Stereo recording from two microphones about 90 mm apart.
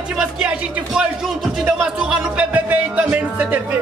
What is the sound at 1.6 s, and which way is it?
Speech, 10° right (ahead or behind).